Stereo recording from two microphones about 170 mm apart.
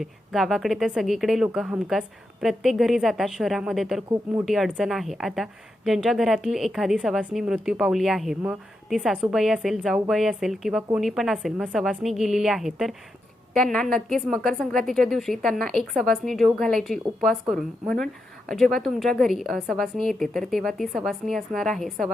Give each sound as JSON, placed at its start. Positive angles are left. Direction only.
{"t": 0.0, "sound": "a woman's voice", "side_deg": 0}